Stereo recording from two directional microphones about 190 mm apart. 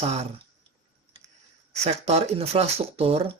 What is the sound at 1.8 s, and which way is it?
Speech, 35° right (ahead or behind).